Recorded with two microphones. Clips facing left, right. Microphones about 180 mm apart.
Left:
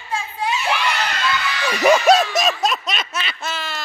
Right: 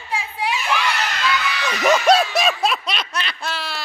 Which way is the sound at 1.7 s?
10° left (ahead or behind).